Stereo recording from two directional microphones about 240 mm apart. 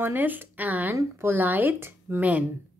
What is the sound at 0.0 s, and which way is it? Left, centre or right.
Speech, centre.